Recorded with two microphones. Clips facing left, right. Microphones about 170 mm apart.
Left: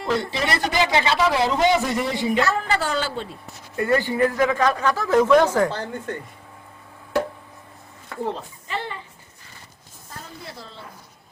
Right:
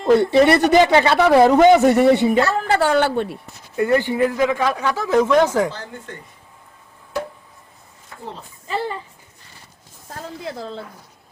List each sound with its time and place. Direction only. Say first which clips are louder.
0.2 s a man's voice: right 11 dB; 60° right (ahead or behind)
2.3 s a woman's voice: right 4 dB; 35° right (ahead or behind)
2.6 s a man's voice: right 7 dB; 60° right (ahead or behind)
3.8 s speech: right 3 dB; 15° right (ahead or behind)
8.6 s speech: right 6 dB; 35° right (ahead or behind)